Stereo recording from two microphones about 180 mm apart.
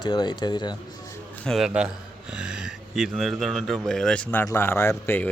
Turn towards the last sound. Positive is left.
turn(degrees=10)  # may be behind; listen again after turning